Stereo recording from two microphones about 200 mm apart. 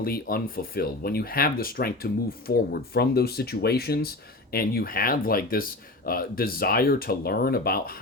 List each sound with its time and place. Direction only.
0.0 s speech: 50° left (ahead or behind)